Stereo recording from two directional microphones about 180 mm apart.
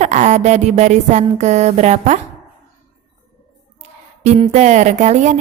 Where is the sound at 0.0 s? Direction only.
40° right (ahead or behind).